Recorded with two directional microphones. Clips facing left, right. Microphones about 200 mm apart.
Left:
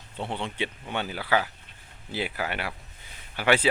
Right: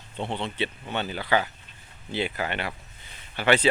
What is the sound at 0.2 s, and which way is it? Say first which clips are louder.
Speech: right 2 dB; 10° left (ahead or behind).